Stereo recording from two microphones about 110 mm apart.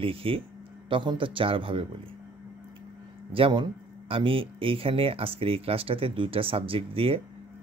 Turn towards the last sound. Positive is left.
turn(degrees=-55)  # may be behind; listen again after turning